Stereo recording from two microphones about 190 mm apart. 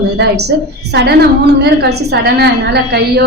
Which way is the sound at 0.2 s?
60° right (ahead or behind).